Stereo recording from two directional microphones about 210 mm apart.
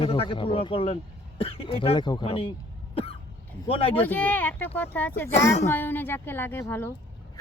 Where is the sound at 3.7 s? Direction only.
25° left (ahead or behind).